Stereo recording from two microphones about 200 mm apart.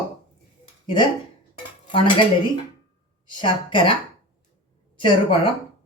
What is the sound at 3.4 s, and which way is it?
Speech, 25° left (ahead or behind).